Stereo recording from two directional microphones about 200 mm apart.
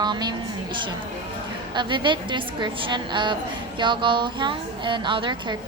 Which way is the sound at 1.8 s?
25° right (ahead or behind).